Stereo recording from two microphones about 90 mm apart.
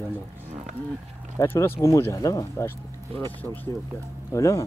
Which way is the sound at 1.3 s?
25° left (ahead or behind).